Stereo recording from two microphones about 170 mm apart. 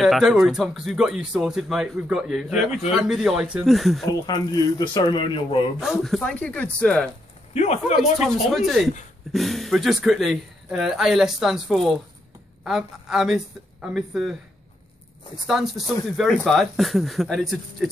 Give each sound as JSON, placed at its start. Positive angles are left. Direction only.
{"t": 0.0, "sound": "speech", "side_deg": 0}
{"t": 4.3, "sound": "speech", "side_deg": 25}
{"t": 5.8, "sound": "speech", "side_deg": 0}
{"t": 7.5, "sound": "speech", "side_deg": 40}
{"t": 8.5, "sound": "speech", "side_deg": 0}
{"t": 15.4, "sound": "speech", "side_deg": 0}